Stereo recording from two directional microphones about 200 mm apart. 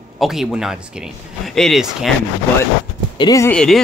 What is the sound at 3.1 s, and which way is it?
Speech, 20° left (ahead or behind).